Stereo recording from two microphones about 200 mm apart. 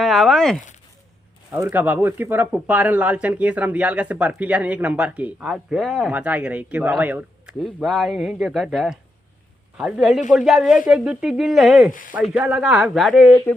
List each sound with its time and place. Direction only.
0.0 s a sound: centre (ahead or behind)
1.5 s speech: 10° right (ahead or behind)
11.9 s speech: 40° left (ahead or behind)
12.3 s speech: 5° right (ahead or behind)